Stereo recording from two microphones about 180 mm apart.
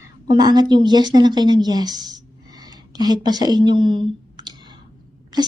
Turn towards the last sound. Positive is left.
turn(degrees=-25)  # may be behind; listen again after turning